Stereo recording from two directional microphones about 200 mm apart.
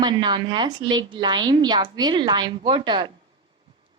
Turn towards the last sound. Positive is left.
turn(degrees=-25)  # may be behind; listen again after turning